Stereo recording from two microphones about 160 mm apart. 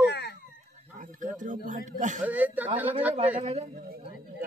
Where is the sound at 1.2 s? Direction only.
50° right (ahead or behind).